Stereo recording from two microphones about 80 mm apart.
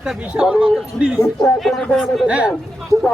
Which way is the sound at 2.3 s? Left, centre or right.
Centre.